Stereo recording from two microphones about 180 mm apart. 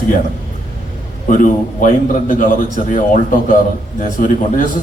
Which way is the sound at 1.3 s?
45° left (ahead or behind).